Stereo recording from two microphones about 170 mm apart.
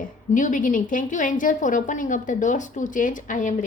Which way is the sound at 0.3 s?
50° left (ahead or behind).